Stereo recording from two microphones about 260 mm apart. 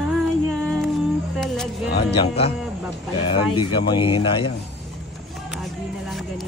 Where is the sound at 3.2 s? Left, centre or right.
Centre.